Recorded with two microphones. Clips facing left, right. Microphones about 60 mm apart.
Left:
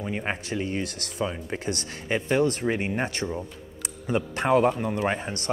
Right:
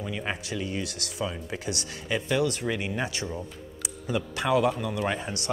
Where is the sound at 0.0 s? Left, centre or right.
Left.